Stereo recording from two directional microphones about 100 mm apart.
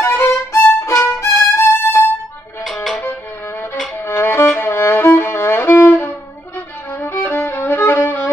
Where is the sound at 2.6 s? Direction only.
Centre (ahead or behind).